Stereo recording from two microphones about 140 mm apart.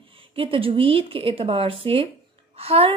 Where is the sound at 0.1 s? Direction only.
40° right (ahead or behind).